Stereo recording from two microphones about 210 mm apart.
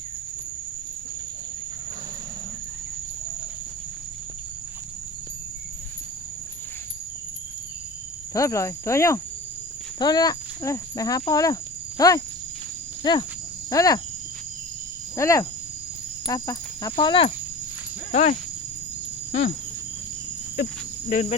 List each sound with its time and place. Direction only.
8.3 s speech: 15° left (ahead or behind)
15.1 s speech: 15° left (ahead or behind)
18.1 s speech: 35° left (ahead or behind)
19.3 s cricket: 45° left (ahead or behind)
21.1 s speech: 40° left (ahead or behind)